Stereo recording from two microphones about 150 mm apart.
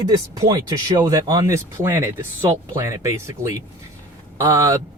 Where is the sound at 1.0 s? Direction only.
20° right (ahead or behind).